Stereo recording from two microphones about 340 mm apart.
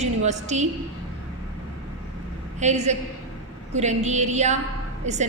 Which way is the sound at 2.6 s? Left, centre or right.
Centre.